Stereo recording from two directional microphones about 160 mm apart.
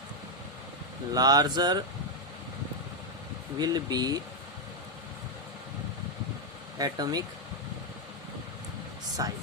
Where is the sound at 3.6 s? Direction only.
25° right (ahead or behind).